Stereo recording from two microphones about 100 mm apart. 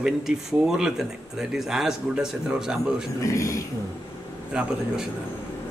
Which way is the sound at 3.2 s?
30° left (ahead or behind).